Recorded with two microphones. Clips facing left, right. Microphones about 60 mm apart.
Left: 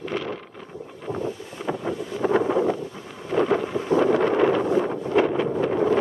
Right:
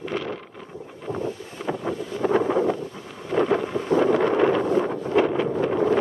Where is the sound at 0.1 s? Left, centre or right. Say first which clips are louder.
Even; centre.